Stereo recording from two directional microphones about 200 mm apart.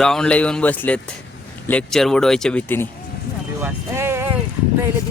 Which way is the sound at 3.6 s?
10° right (ahead or behind).